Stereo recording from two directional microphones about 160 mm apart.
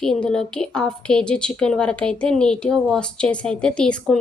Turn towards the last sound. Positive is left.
turn(degrees=5)  # may be behind; listen again after turning